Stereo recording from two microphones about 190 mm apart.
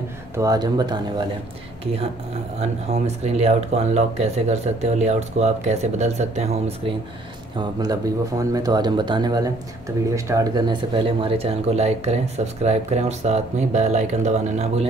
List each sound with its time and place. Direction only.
0.4 s speech: 20° right (ahead or behind)
2.6 s speech: 35° right (ahead or behind)
7.5 s speech: 20° right (ahead or behind); by 14.9 s 35° right (ahead or behind)